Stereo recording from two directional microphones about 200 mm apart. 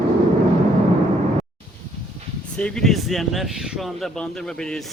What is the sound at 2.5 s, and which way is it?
Speech, 5° left (ahead or behind).